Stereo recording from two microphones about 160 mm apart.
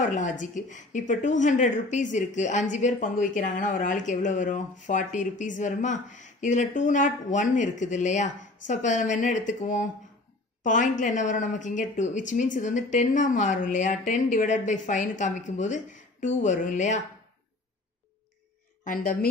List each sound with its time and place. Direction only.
0.0 s a woman's voice: 50° left (ahead or behind)